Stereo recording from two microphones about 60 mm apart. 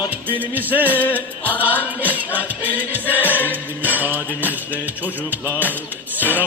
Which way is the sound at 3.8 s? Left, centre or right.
Right.